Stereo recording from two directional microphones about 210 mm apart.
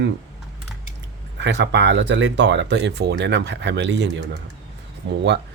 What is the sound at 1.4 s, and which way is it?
Speech, 60° right (ahead or behind).